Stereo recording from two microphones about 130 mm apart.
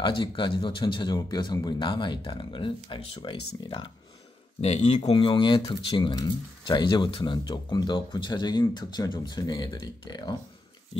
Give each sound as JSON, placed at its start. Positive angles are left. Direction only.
{"t": 0.0, "sound": "speech", "side_deg": 40}
{"t": 4.6, "sound": "speech", "side_deg": 50}
{"t": 5.1, "sound": "speech", "side_deg": 40}